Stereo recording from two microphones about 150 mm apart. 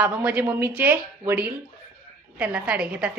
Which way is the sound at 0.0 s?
10° right (ahead or behind).